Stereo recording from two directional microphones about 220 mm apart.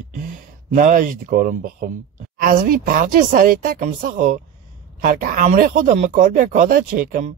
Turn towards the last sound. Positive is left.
turn(degrees=-40)  # may be behind; listen again after turning